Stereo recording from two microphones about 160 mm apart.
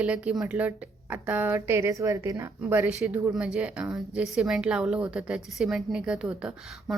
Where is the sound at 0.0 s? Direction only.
10° right (ahead or behind).